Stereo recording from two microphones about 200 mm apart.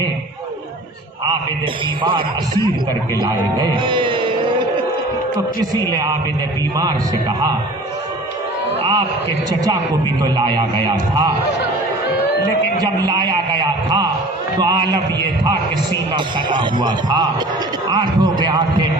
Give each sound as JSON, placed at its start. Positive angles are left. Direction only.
{"t": 2.0, "sound": "a man's voice", "side_deg": -25}
{"t": 5.9, "sound": "a man's voice", "side_deg": -20}
{"t": 8.8, "sound": "mantra", "side_deg": -20}
{"t": 10.2, "sound": "a man's voice", "side_deg": -20}
{"t": 12.8, "sound": "a man's voice", "side_deg": -20}
{"t": 16.1, "sound": "a man's voice", "side_deg": -25}